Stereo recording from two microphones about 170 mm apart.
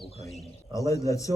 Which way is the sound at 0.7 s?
20° left (ahead or behind).